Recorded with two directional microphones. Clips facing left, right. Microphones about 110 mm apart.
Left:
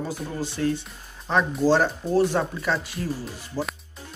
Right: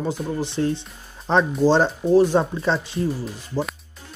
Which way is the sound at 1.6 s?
20° right (ahead or behind).